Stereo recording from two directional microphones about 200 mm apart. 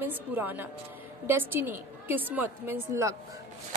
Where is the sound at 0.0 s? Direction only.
10° right (ahead or behind).